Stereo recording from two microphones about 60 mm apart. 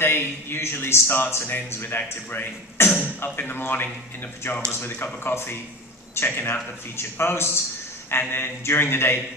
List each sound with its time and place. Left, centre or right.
0.0 s speech: left